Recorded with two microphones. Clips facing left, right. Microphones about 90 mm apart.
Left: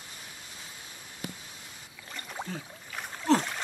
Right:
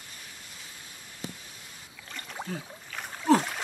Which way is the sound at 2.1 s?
Centre (ahead or behind).